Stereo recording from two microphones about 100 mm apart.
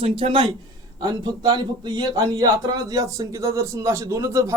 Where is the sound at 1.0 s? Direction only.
45° right (ahead or behind).